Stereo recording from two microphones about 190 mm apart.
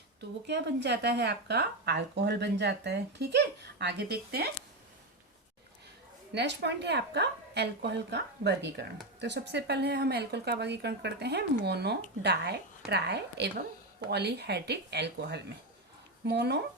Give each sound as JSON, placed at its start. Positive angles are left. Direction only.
{"t": 0.2, "sound": "speech", "side_deg": -60}
{"t": 6.3, "sound": "speech", "side_deg": -65}